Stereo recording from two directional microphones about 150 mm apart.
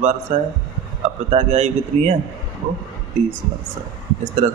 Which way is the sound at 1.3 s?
50° right (ahead or behind).